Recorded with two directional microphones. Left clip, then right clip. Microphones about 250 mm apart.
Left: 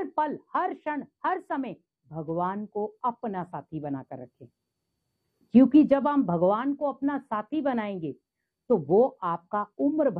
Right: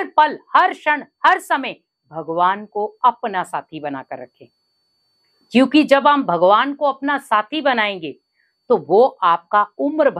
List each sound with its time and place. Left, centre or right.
0.0 s a woman's voice: centre
2.7 s speech: right
3.0 s a woman's voice: centre
5.5 s a woman's voice: centre
8.8 s speech: right
9.2 s a woman's voice: centre